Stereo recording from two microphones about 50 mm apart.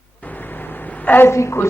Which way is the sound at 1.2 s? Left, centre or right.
Left.